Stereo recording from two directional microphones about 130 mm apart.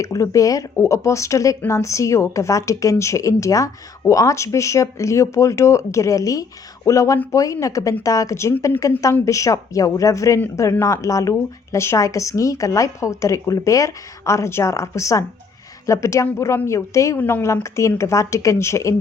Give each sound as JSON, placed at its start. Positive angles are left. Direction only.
{"t": 0.0, "sound": "speech", "side_deg": 25}